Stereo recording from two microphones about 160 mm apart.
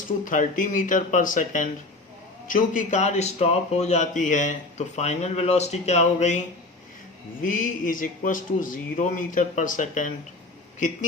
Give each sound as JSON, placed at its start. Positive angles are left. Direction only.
{"t": 0.3, "sound": "a man's voice", "side_deg": 55}
{"t": 7.4, "sound": "a man's voice", "side_deg": 55}